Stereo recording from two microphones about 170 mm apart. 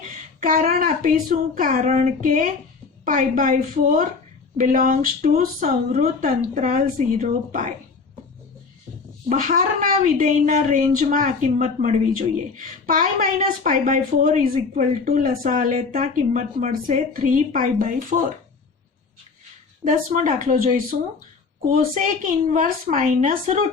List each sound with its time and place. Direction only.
0.3 s speech: 50° right (ahead or behind)
9.3 s speech: 50° right (ahead or behind)
19.8 s speech: 50° right (ahead or behind)